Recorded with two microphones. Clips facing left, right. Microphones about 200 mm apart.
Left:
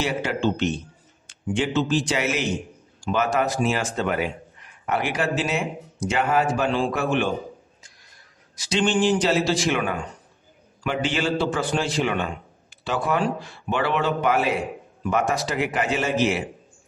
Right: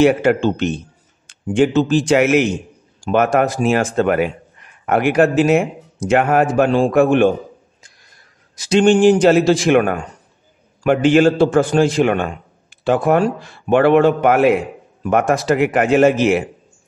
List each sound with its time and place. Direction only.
0.0 s a man's voice: 55° right (ahead or behind)
8.5 s a man's voice: 50° right (ahead or behind)